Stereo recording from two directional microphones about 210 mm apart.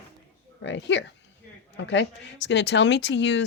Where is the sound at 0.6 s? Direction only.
60° left (ahead or behind).